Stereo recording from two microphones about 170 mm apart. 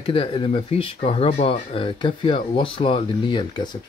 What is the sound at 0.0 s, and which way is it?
Speech, 30° left (ahead or behind).